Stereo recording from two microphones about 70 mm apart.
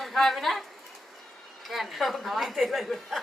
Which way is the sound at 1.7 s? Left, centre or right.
Centre.